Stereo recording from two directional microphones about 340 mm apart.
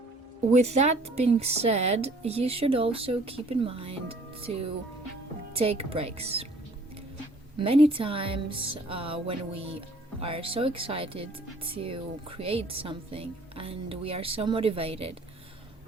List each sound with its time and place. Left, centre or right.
0.6 s speech: centre
5.5 s speech: centre
7.6 s speech: centre